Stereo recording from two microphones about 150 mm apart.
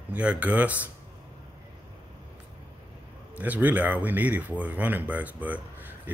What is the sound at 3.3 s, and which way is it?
A woman's voice, 10° right (ahead or behind).